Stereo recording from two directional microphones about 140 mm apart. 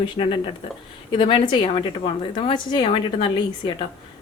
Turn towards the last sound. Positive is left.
turn(degrees=40)  # may be behind; listen again after turning